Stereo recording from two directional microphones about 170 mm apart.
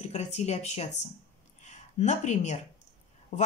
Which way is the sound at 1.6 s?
45° left (ahead or behind).